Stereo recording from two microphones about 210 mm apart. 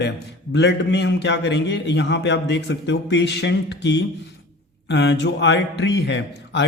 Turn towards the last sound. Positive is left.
turn(degrees=55)  # may be behind; listen again after turning